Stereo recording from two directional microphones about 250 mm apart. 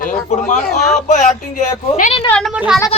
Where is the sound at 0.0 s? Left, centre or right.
Left.